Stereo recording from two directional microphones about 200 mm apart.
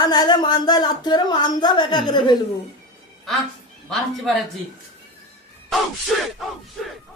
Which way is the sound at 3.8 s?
Centre (ahead or behind).